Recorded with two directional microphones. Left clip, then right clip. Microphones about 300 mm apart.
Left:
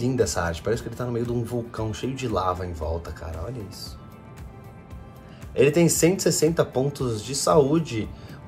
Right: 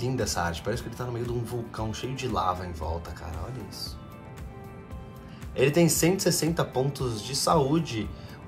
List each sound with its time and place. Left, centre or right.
0.0 s speech: centre
5.6 s speech: centre